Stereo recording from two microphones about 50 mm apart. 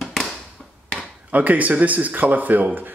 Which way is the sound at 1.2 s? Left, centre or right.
Right.